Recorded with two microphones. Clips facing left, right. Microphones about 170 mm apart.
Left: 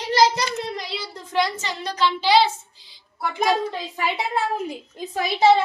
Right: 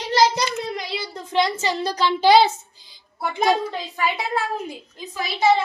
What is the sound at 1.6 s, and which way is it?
A woman's voice, 30° right (ahead or behind).